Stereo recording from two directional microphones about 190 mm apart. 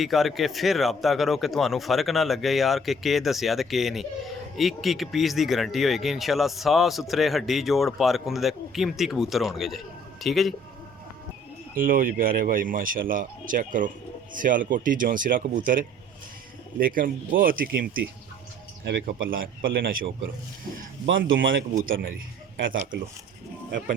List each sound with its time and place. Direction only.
0.0 s speech: centre (ahead or behind)
11.7 s speech: 50° right (ahead or behind)
18.9 s speech: 70° right (ahead or behind)
19.3 s speech: 50° right (ahead or behind)
21.2 s speech: 85° right
21.8 s speech: 50° right (ahead or behind)
22.5 s speech: 90° right